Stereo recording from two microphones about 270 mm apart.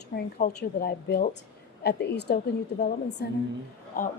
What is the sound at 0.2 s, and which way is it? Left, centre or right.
A woman's voice, left.